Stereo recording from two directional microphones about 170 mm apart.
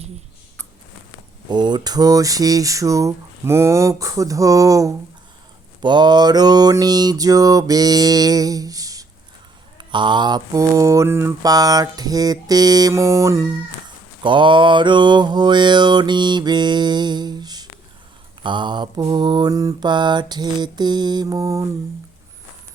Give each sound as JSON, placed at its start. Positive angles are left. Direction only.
{"t": 1.5, "sound": "mantra", "side_deg": -25}